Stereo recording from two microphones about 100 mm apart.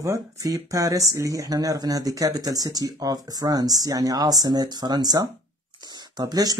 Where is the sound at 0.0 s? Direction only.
30° right (ahead or behind).